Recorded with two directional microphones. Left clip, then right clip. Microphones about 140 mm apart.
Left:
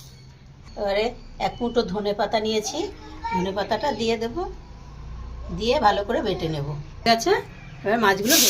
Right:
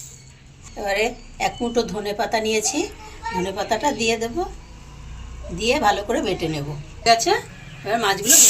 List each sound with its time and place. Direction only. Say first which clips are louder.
0.9 s a woman's voice: right 2 dB; 10° left (ahead or behind)
5.5 s a woman's voice: right 1 dB; 15° left (ahead or behind)
7.0 s a woman's voice: right 3 dB; 60° left (ahead or behind)
7.9 s speech: left 1 dB; 75° left (ahead or behind)